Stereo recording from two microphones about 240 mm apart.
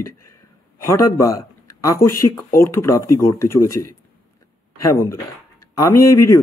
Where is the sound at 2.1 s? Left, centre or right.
Left.